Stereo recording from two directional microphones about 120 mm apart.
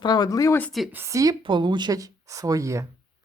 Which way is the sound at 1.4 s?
40° right (ahead or behind).